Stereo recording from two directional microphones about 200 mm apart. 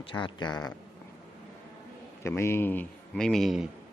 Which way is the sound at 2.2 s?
15° left (ahead or behind).